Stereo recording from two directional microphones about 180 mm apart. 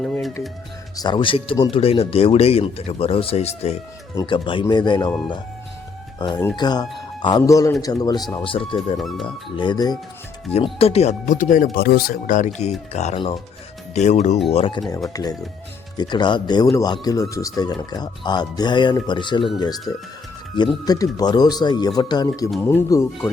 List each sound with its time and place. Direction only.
0.0 s speech: 5° left (ahead or behind)
0.9 s speech: 25° left (ahead or behind)
6.1 s speech: 25° left (ahead or behind)
9.0 s speech: centre (ahead or behind)
9.2 s speech: 25° left (ahead or behind)
10.8 s speech: 35° left (ahead or behind)
14.5 s speech: 30° left (ahead or behind)
22.6 s speech: 10° left (ahead or behind)